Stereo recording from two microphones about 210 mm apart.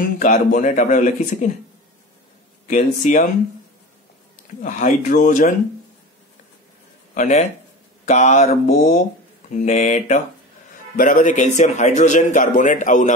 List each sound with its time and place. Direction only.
0.0 s a man's voice: 40° left (ahead or behind)
2.7 s a man's voice: 35° left (ahead or behind)
4.6 s a man's voice: 35° left (ahead or behind)
7.2 s a man's voice: 35° left (ahead or behind)